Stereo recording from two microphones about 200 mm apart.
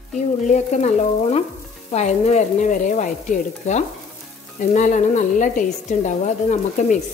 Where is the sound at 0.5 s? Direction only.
35° left (ahead or behind).